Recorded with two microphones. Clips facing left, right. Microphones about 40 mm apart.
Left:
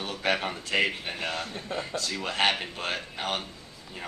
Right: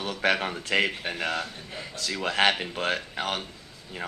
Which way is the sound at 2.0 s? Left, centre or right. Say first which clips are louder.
Right 4 dB; right.